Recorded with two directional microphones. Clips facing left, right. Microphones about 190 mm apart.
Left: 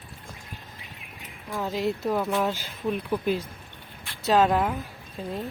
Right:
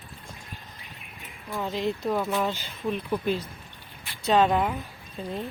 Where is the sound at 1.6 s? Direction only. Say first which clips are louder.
Left 1 dB; 5° left (ahead or behind).